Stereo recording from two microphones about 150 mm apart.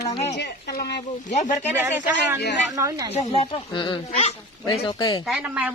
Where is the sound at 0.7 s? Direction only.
90° left.